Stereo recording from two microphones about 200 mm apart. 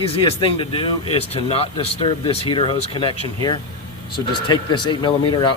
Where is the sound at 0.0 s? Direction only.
30° left (ahead or behind).